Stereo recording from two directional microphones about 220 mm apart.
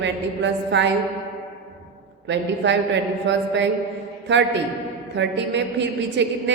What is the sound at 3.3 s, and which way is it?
Speech, 55° right (ahead or behind).